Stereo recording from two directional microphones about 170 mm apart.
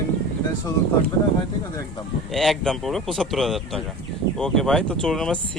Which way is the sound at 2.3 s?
Centre (ahead or behind).